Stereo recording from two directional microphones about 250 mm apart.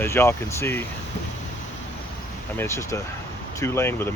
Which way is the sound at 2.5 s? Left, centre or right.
Centre.